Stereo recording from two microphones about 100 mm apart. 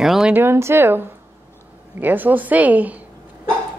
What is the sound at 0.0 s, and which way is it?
Speech, 5° right (ahead or behind).